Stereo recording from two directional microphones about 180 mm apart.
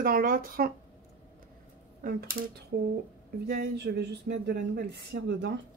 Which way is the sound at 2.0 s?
60° right (ahead or behind).